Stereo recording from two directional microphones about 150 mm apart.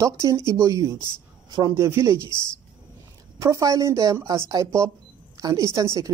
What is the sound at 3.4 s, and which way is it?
A woman's voice, 20° right (ahead or behind).